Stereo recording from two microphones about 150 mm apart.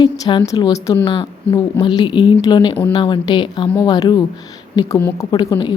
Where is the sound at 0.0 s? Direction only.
30° left (ahead or behind).